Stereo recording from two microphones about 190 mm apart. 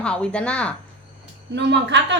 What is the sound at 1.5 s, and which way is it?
Speech, 65° right (ahead or behind).